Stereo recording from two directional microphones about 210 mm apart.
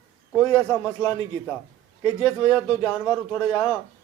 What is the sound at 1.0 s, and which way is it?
Speech, 20° left (ahead or behind).